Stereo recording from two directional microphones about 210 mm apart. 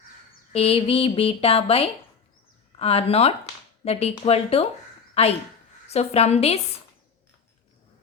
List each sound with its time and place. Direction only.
0.5 s speech: 30° left (ahead or behind)